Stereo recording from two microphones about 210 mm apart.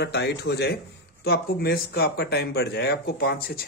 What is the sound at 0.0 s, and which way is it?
Speech, 55° left (ahead or behind).